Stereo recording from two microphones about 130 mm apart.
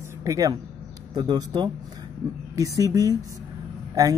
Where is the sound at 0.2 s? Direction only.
25° right (ahead or behind).